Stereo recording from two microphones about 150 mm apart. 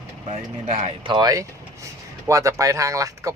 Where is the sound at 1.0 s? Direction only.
25° right (ahead or behind).